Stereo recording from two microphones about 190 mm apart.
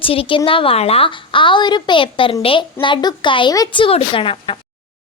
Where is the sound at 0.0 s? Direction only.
30° left (ahead or behind).